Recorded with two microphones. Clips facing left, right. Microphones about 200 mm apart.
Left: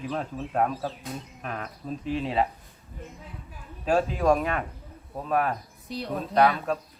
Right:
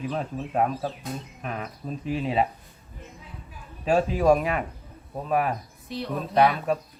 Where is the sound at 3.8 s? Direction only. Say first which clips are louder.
Right 2 dB; centre (ahead or behind).